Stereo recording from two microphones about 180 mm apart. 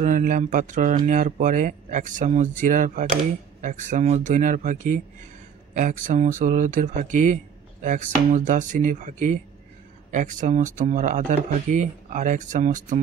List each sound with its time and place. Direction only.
0.0 s speech: 45° right (ahead or behind)